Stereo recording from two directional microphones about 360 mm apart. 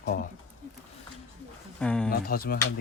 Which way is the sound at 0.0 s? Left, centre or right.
Left.